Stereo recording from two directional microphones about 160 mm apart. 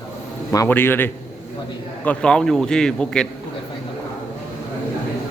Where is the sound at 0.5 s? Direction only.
15° left (ahead or behind).